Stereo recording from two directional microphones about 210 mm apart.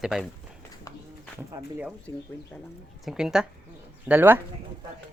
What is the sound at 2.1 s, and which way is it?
Speech, 15° left (ahead or behind).